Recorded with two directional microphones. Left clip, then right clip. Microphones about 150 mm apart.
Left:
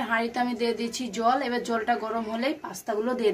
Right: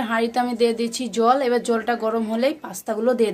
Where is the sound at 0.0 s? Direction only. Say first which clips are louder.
Right 5 dB; 75° right (ahead or behind).